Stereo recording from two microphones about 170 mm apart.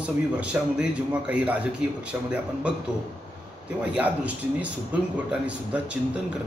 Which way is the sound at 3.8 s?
10° right (ahead or behind).